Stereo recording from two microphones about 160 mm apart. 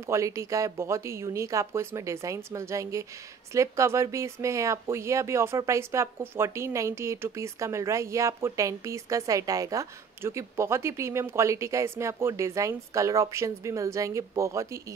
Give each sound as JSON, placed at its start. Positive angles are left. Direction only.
{"t": 0.0, "sound": "speech", "side_deg": -20}